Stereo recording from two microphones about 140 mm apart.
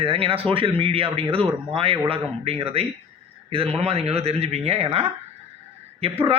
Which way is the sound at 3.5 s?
45° right (ahead or behind).